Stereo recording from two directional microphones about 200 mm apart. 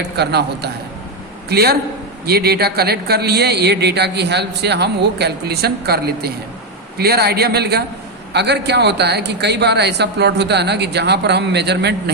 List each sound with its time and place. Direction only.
0.2 s speech: 55° right (ahead or behind)